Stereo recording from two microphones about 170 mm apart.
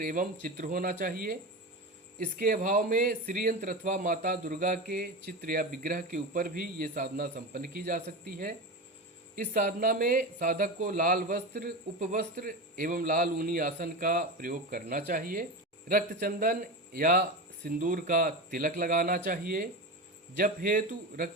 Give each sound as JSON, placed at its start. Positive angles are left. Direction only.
{"t": 0.0, "sound": "a man's voice", "side_deg": -55}